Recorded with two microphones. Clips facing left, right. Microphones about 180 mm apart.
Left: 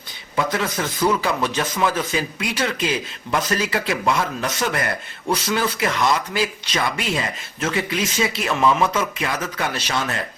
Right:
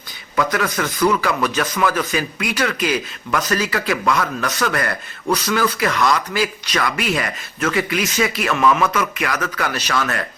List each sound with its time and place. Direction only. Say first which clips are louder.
0.3 s a man's voice: right 2 dB; 25° left (ahead or behind)